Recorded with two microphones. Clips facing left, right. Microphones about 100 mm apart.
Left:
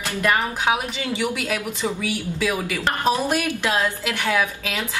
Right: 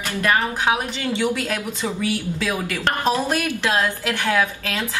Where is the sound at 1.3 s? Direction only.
10° left (ahead or behind).